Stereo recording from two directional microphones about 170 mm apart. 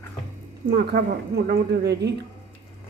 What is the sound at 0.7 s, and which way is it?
A woman's voice, 70° right (ahead or behind).